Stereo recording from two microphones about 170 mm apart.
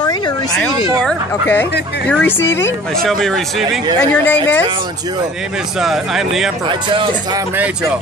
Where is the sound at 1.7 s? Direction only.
75° left (ahead or behind).